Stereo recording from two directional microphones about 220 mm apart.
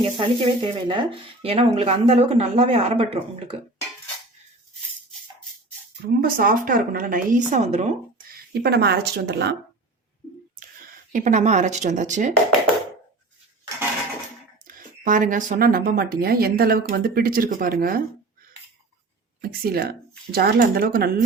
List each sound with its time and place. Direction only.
0.0 s speech: 20° right (ahead or behind)
6.1 s speech: 40° right (ahead or behind)
8.6 s speech: 50° right (ahead or behind)
11.1 s speech: 35° right (ahead or behind)
14.7 s speech: 35° right (ahead or behind)
19.4 s speech: 45° right (ahead or behind)